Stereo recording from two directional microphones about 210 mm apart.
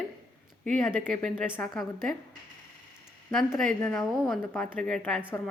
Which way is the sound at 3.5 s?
5° left (ahead or behind).